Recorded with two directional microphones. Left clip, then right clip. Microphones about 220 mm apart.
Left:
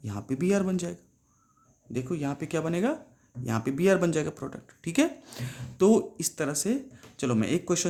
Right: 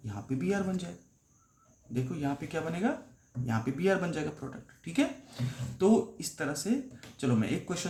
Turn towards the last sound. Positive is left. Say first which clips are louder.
# left 6 dB
turn(degrees=55)  # may be behind; listen again after turning